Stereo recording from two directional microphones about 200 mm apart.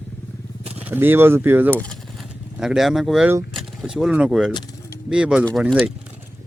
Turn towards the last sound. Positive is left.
turn(degrees=0)  # may be behind; listen again after turning